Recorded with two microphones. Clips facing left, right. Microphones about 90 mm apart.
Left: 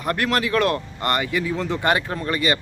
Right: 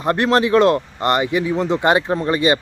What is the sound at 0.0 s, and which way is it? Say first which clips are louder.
Speech: right 6 dB; 25° right (ahead or behind).